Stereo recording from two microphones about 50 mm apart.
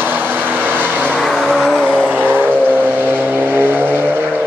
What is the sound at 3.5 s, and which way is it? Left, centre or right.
Vehicle, right.